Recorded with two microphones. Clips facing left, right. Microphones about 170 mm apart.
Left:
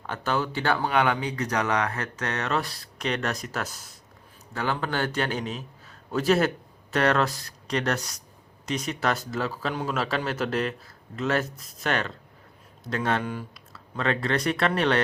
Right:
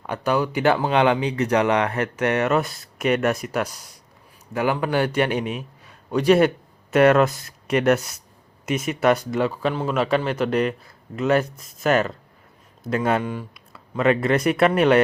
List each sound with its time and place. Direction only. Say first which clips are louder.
0.1 s speech: right 6 dB; 10° right (ahead or behind)
6.9 s speech: right 8 dB; 5° right (ahead or behind)
9.4 s speech: right 7 dB; 20° right (ahead or behind)
9.6 s speech: right 6 dB; 5° right (ahead or behind)